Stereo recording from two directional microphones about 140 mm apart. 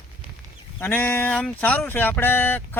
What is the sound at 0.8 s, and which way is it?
Speech, 15° left (ahead or behind).